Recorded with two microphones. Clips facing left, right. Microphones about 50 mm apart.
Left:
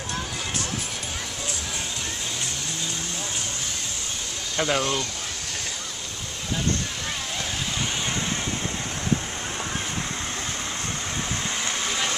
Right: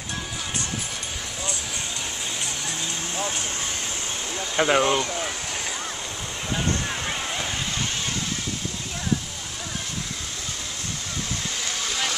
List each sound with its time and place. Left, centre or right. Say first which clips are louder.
4.6 s speech: right 4 dB; right